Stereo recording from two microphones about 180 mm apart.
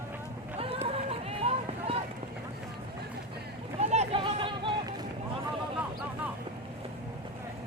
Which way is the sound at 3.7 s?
35° right (ahead or behind).